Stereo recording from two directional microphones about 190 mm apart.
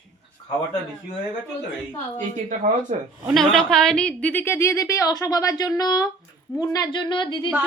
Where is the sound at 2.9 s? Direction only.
40° right (ahead or behind).